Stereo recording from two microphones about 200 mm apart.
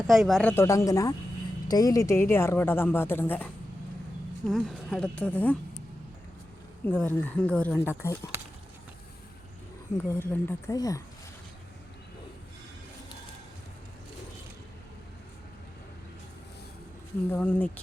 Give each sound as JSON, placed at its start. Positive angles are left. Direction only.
{"t": 0.1, "sound": "a woman's voice", "side_deg": 0}
{"t": 6.8, "sound": "a woman's voice", "side_deg": 10}
{"t": 10.2, "sound": "a woman's voice", "side_deg": 15}
{"t": 17.3, "sound": "a woman's voice", "side_deg": 10}